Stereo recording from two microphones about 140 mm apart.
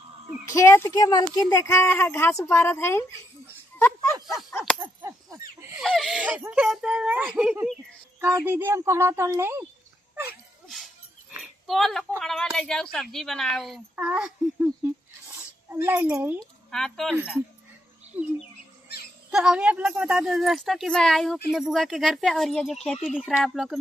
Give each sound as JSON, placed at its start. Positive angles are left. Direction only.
{"t": 0.5, "sound": "speech", "side_deg": 20}
{"t": 3.7, "sound": "a sound", "side_deg": 15}
{"t": 4.3, "sound": "a woman's voice", "side_deg": 0}
{"t": 5.8, "sound": "a woman's voice", "side_deg": 0}
{"t": 6.1, "sound": "a woman's voice", "side_deg": -10}
{"t": 8.2, "sound": "speech", "side_deg": -15}
{"t": 10.7, "sound": "a sound", "side_deg": 0}
{"t": 12.2, "sound": "a woman's voice", "side_deg": 5}
{"t": 13.9, "sound": "speech", "side_deg": -10}
{"t": 15.7, "sound": "speech", "side_deg": -15}
{"t": 16.7, "sound": "a woman's voice", "side_deg": 5}
{"t": 17.2, "sound": "speech", "side_deg": -10}
{"t": 19.3, "sound": "a woman's voice", "side_deg": -5}